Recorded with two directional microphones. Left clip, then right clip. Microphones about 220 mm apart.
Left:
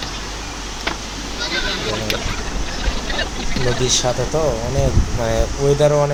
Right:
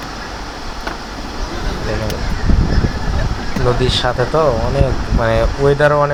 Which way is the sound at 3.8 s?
Centre (ahead or behind).